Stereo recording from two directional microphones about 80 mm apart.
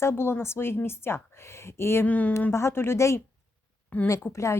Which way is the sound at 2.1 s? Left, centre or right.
Centre.